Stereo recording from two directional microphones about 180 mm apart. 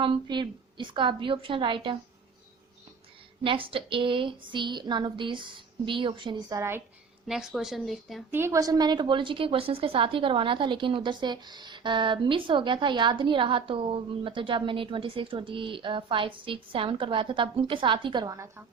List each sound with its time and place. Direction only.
0.0 s a woman's voice: 25° right (ahead or behind)
3.4 s a woman's voice: 30° right (ahead or behind); by 6.8 s 15° right (ahead or behind)
7.3 s speech: 5° right (ahead or behind)
8.3 s a woman's voice: 15° right (ahead or behind)